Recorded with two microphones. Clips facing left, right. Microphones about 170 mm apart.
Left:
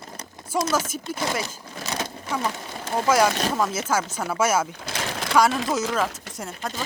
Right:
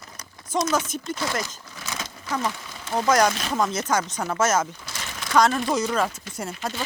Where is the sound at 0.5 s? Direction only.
10° left (ahead or behind).